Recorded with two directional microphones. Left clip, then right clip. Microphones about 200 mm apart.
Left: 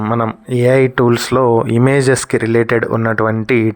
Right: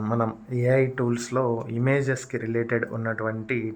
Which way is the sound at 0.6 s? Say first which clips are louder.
Left 11 dB; 35° left (ahead or behind).